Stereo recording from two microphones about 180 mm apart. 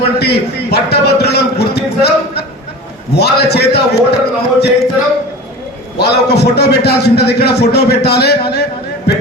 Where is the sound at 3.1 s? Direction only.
65° left (ahead or behind).